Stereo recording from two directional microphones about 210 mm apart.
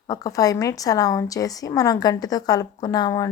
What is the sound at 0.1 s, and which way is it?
A woman's voice, 15° left (ahead or behind).